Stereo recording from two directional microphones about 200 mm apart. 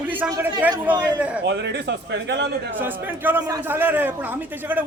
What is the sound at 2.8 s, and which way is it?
A man's voice, 10° right (ahead or behind).